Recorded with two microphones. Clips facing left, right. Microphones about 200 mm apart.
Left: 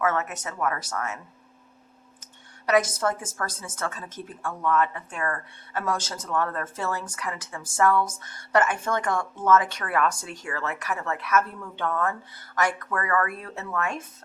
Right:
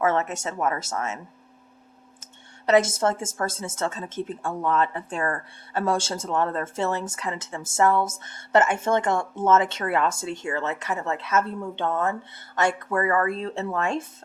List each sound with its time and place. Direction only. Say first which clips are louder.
0.0 s a woman's voice: right 3 dB; 25° right (ahead or behind)
2.6 s a woman's voice: right 3 dB; 25° right (ahead or behind)